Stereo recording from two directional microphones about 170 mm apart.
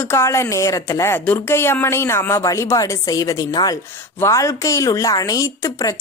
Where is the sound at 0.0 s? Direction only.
15° left (ahead or behind).